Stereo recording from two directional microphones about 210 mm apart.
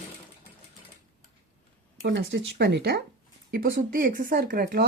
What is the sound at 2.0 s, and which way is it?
Speech, 60° right (ahead or behind).